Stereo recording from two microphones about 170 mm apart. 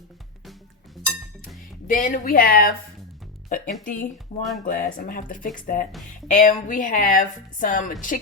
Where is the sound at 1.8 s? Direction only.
50° left (ahead or behind).